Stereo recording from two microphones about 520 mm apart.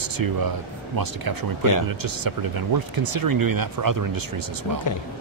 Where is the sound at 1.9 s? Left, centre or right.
Right.